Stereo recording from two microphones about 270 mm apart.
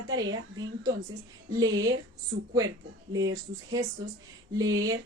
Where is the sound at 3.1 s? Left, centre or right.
Centre.